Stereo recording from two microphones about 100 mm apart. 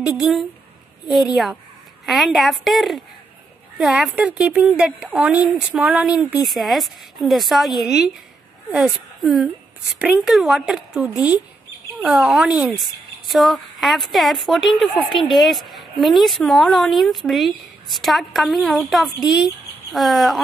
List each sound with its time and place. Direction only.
0.0 s a woman's voice: 5° right (ahead or behind)
6.4 s a woman's voice: centre (ahead or behind)
9.9 s speech: 15° right (ahead or behind)
10.2 s a woman's voice: centre (ahead or behind)
13.3 s a woman's voice: centre (ahead or behind)